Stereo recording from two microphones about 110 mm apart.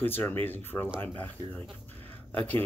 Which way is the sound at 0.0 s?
20° left (ahead or behind).